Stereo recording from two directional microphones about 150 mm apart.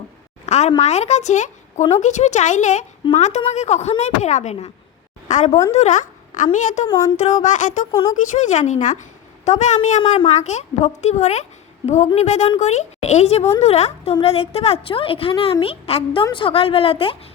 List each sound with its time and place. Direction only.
0.4 s a sound: 50° left (ahead or behind)
0.8 s a woman's voice: 50° left (ahead or behind)
6.8 s speech: 20° left (ahead or behind)
7.2 s a woman's voice: 50° left (ahead or behind)